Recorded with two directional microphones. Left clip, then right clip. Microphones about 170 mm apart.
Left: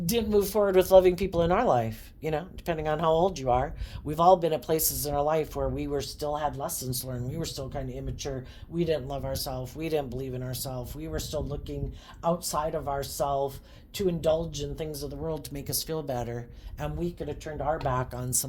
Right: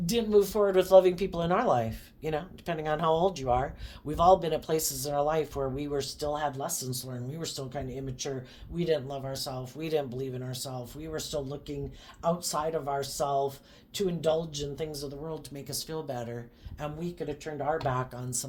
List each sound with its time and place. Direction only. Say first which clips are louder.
0.0 s speech: right 1 dB; 40° left (ahead or behind)